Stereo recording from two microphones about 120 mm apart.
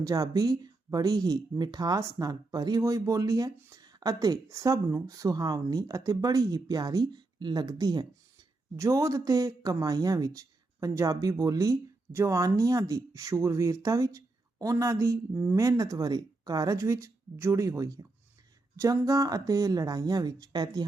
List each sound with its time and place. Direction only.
0.0 s speech: 30° right (ahead or behind)
15.4 s speech: 15° right (ahead or behind)
15.6 s speech: 30° right (ahead or behind)